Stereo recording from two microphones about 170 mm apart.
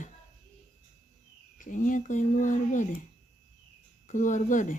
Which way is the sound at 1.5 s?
50° left (ahead or behind).